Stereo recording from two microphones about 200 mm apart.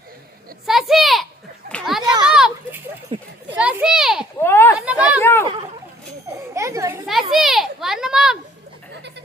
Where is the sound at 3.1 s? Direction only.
30° right (ahead or behind).